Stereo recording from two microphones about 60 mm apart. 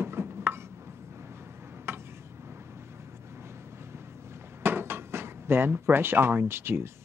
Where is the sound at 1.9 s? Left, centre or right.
Right.